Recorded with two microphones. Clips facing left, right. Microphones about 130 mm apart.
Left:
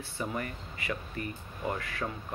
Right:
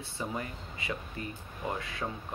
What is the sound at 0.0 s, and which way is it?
Speech, 20° right (ahead or behind).